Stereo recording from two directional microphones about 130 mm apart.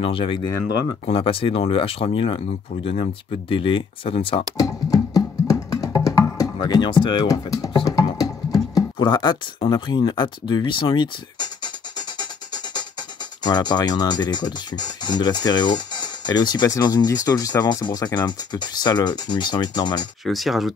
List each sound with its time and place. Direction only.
0.0 s speech: 40° left (ahead or behind)
0.5 s speech: 30° left (ahead or behind)
1.0 s speech: 45° left (ahead or behind)
4.6 s music: 25° left (ahead or behind)
8.9 s speech: 35° left (ahead or behind)
13.4 s speech: 35° left (ahead or behind)
20.2 s speech: centre (ahead or behind)